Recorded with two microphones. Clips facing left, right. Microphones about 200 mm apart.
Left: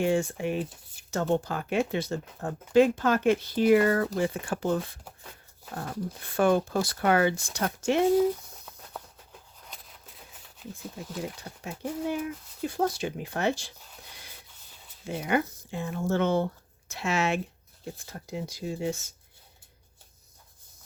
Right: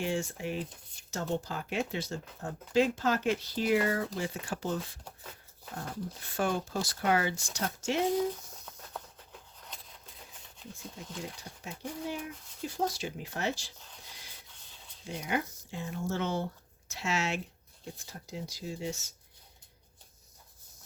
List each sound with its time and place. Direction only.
0.0 s speech: 55° left (ahead or behind)
11.4 s speech: 55° left (ahead or behind)
15.0 s speech: 60° left (ahead or behind)